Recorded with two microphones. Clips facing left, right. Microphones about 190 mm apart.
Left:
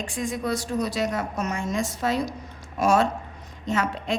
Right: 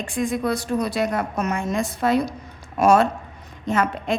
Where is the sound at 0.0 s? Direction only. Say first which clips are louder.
Right 5 dB; 60° right (ahead or behind).